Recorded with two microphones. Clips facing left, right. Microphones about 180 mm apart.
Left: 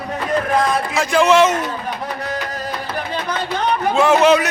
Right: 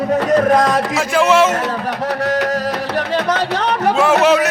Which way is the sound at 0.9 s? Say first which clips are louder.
Left 1 dB; 5° right (ahead or behind).